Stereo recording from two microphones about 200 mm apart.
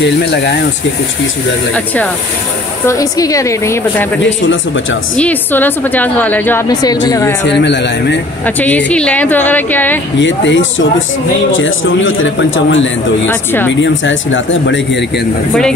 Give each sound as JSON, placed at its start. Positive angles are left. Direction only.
{"t": 0.0, "sound": "speech", "side_deg": 60}
{"t": 2.9, "sound": "a woman's voice", "side_deg": 15}
{"t": 5.1, "sound": "a woman's voice", "side_deg": 5}
{"t": 7.4, "sound": "speech", "side_deg": 60}
{"t": 8.5, "sound": "a woman's voice", "side_deg": 10}
{"t": 10.1, "sound": "a man's voice", "side_deg": 65}
{"t": 13.3, "sound": "a woman's voice", "side_deg": 10}
{"t": 13.7, "sound": "speech", "side_deg": 65}